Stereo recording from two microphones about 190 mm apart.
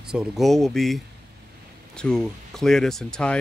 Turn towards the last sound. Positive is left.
turn(degrees=5)  # may be behind; listen again after turning